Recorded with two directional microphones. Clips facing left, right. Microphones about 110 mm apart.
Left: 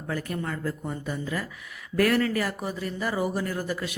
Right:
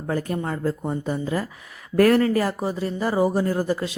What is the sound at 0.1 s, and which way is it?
Speech, 30° right (ahead or behind).